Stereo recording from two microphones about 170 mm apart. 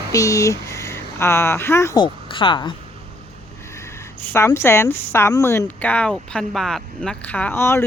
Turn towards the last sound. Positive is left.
turn(degrees=15)  # may be behind; listen again after turning